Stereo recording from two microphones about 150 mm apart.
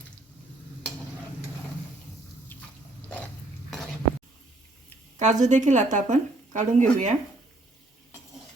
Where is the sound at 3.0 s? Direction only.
10° left (ahead or behind).